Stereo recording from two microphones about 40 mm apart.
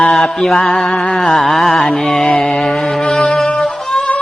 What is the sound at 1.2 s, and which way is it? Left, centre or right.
Music, centre.